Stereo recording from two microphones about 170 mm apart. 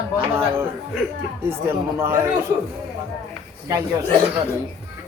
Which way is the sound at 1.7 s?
15° right (ahead or behind).